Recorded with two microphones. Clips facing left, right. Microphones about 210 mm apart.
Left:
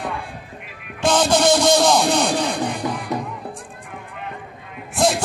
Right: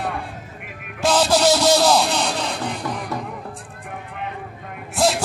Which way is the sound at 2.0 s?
55° left (ahead or behind).